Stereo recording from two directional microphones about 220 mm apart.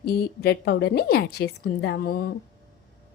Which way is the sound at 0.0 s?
45° left (ahead or behind).